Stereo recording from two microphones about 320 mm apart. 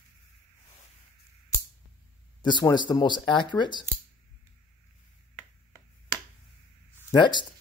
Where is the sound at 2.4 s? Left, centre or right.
Centre.